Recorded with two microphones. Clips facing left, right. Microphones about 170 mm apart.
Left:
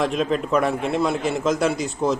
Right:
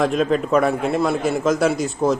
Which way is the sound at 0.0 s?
Centre (ahead or behind).